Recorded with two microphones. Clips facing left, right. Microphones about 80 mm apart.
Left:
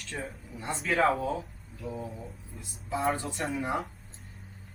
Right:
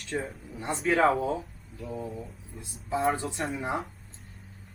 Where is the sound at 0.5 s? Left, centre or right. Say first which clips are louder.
Right 3 dB; centre.